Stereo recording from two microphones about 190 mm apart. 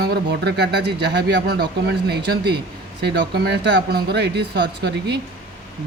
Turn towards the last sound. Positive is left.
turn(degrees=-60)  # may be behind; listen again after turning